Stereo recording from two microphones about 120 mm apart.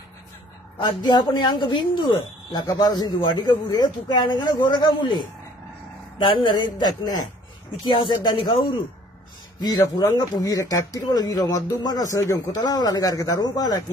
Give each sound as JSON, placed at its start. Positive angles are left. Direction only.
{"t": 0.7, "sound": "speech", "side_deg": 35}
{"t": 9.6, "sound": "speech", "side_deg": 35}